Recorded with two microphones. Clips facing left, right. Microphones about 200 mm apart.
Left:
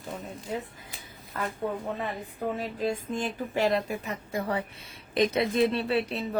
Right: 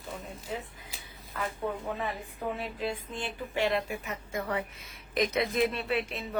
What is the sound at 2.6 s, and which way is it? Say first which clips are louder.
Speech: left 4 dB; 40° left (ahead or behind).